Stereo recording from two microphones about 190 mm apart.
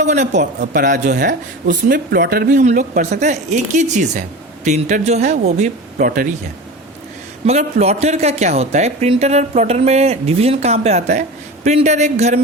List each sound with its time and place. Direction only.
0.0 s speech: 40° right (ahead or behind)
7.4 s speech: 35° right (ahead or behind)